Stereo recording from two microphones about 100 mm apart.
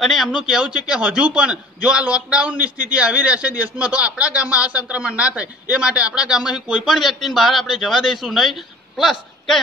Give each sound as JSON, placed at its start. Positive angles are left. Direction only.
{"t": 0.0, "sound": "a man's voice", "side_deg": 0}